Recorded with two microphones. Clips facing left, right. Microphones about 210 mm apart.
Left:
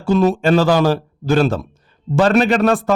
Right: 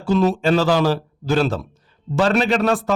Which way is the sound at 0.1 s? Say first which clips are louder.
Left 3 dB; 50° left (ahead or behind).